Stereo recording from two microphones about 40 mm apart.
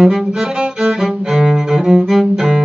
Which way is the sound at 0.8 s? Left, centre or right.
Centre.